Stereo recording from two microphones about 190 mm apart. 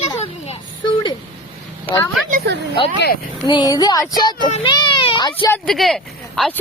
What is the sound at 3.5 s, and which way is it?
Speech, 20° left (ahead or behind).